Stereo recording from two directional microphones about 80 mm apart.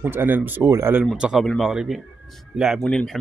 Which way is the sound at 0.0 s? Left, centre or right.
Right.